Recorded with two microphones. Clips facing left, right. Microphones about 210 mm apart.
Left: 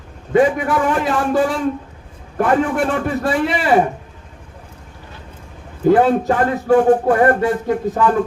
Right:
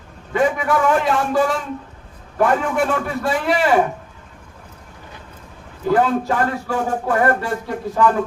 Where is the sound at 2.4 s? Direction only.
50° left (ahead or behind).